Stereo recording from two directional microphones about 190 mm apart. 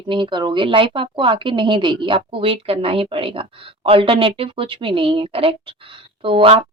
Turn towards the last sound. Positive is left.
turn(degrees=-30)  # may be behind; listen again after turning